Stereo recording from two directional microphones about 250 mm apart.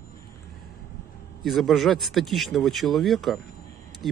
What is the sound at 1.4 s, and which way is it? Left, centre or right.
Speech, centre.